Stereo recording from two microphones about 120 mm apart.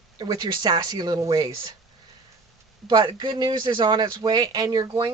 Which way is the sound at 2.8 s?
35° right (ahead or behind).